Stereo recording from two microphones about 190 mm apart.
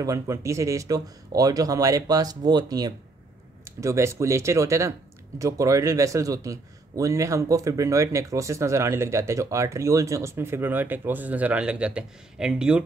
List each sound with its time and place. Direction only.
0.0 s a man's voice: 15° right (ahead or behind)